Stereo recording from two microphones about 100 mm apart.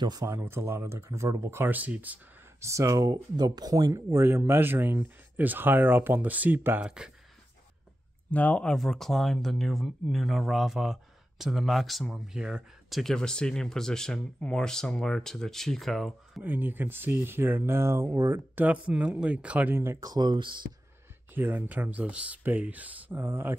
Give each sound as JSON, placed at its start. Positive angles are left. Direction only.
{"t": 0.0, "sound": "speech", "side_deg": -40}
{"t": 0.3, "sound": "speech", "side_deg": -25}
{"t": 2.6, "sound": "speech", "side_deg": -30}
{"t": 6.8, "sound": "speech", "side_deg": -10}
{"t": 8.3, "sound": "speech", "side_deg": 15}
{"t": 13.0, "sound": "speech", "side_deg": 5}
{"t": 16.4, "sound": "speech", "side_deg": -20}
{"t": 20.1, "sound": "speech", "side_deg": -45}
{"t": 21.3, "sound": "speech", "side_deg": -20}